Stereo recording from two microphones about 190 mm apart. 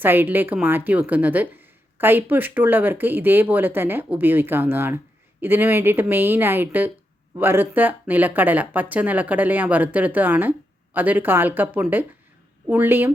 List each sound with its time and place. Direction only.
0.0 s a woman's voice: 10° right (ahead or behind)